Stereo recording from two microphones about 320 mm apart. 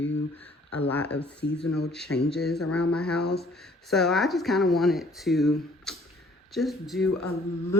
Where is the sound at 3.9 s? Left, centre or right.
Centre.